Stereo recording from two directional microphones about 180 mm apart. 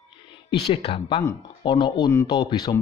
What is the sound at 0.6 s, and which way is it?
Speech, 30° left (ahead or behind).